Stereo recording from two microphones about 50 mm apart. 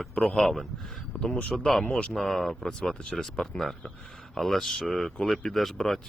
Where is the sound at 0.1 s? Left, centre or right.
Centre.